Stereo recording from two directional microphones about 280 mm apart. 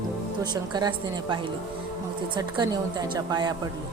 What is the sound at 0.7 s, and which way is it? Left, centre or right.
A woman's voice, centre.